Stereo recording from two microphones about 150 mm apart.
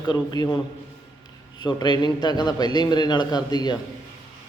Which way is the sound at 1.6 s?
30° left (ahead or behind).